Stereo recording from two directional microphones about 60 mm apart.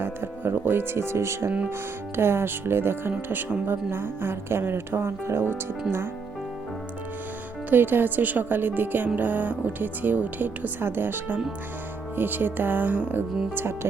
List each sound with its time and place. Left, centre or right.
0.0 s speech: right
1.5 s speech: right
2.1 s speech: right
7.7 s speech: right